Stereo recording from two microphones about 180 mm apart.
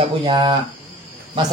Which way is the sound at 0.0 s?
30° right (ahead or behind).